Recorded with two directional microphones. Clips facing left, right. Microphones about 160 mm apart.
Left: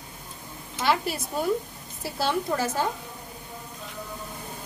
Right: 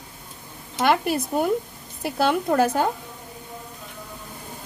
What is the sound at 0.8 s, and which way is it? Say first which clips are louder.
A woman's voice: right 5 dB; 55° right (ahead or behind).